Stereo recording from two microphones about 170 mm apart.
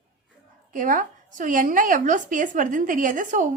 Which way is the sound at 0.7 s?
50° right (ahead or behind).